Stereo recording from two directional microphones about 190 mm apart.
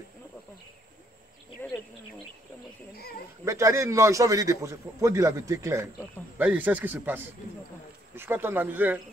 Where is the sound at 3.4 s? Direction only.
15° right (ahead or behind).